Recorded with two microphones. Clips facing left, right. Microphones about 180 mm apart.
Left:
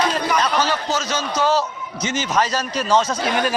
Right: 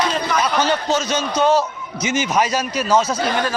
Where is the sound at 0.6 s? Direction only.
20° right (ahead or behind); by 3.3 s 5° right (ahead or behind).